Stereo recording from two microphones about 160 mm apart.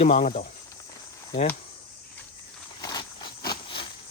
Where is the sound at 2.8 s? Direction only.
25° left (ahead or behind).